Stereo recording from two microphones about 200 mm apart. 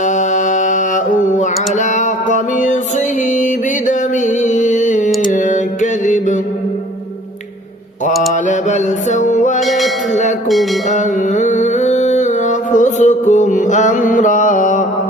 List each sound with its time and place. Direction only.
0.0 s music: 35° left (ahead or behind)
8.3 s music: 35° left (ahead or behind)
9.6 s music: centre (ahead or behind)
10.8 s music: 35° left (ahead or behind)